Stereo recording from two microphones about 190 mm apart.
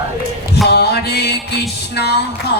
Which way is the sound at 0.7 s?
60° left (ahead or behind).